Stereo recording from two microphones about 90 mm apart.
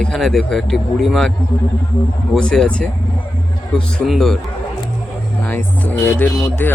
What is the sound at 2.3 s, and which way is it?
Speech, 5° left (ahead or behind).